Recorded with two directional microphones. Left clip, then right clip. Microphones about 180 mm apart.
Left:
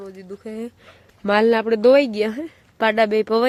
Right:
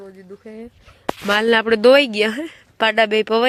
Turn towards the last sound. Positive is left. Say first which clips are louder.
# right 2 dB
turn(degrees=0)  # may be behind; listen again after turning